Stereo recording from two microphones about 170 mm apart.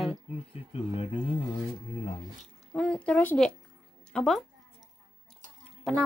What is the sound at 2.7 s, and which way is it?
Speech, 10° left (ahead or behind).